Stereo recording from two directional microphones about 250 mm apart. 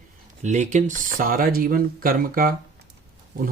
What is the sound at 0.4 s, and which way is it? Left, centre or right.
Speech, right.